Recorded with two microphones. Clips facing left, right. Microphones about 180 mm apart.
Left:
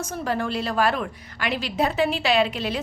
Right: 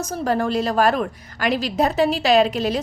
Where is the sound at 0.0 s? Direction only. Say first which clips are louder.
Right 5 dB; 40° right (ahead or behind).